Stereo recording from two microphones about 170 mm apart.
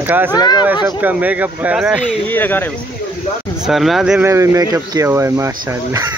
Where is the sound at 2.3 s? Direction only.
10° left (ahead or behind).